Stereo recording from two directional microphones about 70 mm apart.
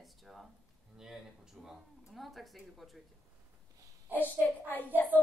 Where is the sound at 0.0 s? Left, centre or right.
Centre.